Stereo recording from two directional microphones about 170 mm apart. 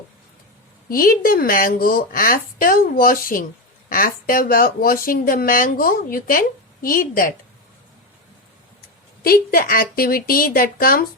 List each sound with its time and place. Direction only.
0.9 s a woman's voice: 55° left (ahead or behind)
9.2 s a woman's voice: 60° left (ahead or behind)